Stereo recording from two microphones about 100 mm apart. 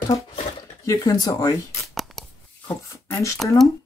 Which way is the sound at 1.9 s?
Centre (ahead or behind).